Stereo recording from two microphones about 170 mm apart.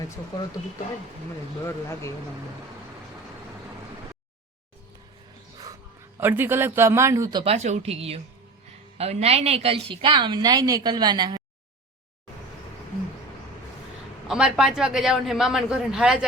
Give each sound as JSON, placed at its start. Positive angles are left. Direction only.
{"t": 1.6, "sound": "speech", "side_deg": 15}
{"t": 6.1, "sound": "a man's voice", "side_deg": -10}
{"t": 7.4, "sound": "a woman's voice", "side_deg": -40}
{"t": 14.3, "sound": "a man's voice", "side_deg": -5}